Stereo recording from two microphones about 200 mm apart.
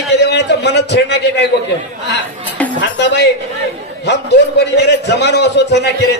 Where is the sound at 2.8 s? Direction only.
60° left (ahead or behind).